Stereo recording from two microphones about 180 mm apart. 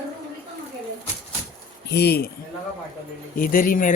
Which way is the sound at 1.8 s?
65° left (ahead or behind).